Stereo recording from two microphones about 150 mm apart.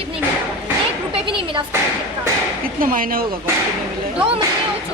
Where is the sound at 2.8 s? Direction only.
70° right (ahead or behind).